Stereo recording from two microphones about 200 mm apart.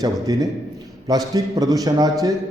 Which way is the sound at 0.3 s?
20° right (ahead or behind).